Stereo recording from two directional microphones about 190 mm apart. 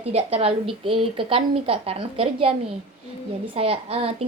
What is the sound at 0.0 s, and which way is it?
A woman's voice, 35° right (ahead or behind).